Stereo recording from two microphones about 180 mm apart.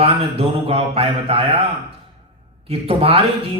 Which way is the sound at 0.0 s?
35° right (ahead or behind).